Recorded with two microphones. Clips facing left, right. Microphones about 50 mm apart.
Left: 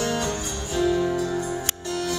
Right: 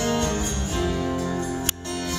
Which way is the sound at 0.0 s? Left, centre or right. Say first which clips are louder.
Right 2 dB; right.